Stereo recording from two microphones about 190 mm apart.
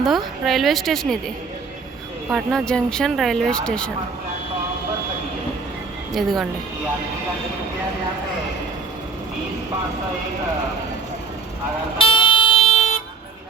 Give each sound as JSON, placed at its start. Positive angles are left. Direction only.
{"t": 0.0, "sound": "speech", "side_deg": 0}
{"t": 2.3, "sound": "speech", "side_deg": 0}
{"t": 6.1, "sound": "speech", "side_deg": 0}
{"t": 11.9, "sound": "vehicle", "side_deg": 25}